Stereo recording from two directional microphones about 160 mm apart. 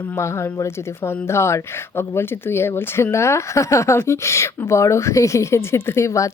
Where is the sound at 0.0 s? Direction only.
15° left (ahead or behind).